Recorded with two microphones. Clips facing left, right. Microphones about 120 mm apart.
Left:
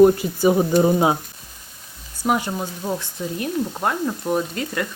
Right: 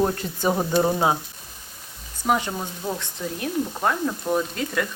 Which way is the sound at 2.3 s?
5° left (ahead or behind).